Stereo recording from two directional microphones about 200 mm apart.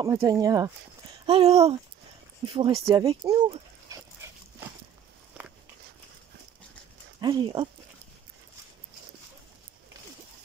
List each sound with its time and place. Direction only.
0.0 s speech: 15° right (ahead or behind)
1.2 s speech: 30° right (ahead or behind)
2.9 s speech: 15° right (ahead or behind)
3.9 s dog: 15° right (ahead or behind)
7.2 s speech: 20° right (ahead or behind)